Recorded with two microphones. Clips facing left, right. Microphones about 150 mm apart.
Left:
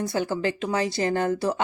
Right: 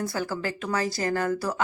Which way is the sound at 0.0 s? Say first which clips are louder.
Left 4 dB; 25° left (ahead or behind).